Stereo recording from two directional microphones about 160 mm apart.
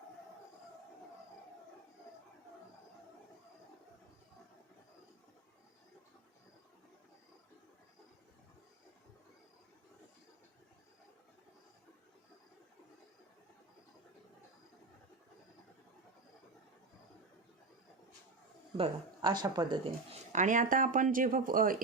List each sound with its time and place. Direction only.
18.8 s speech: 30° right (ahead or behind)
20.3 s speech: 50° right (ahead or behind)